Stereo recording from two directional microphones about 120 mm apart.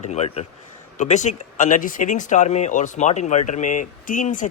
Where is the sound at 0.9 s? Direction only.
90° left.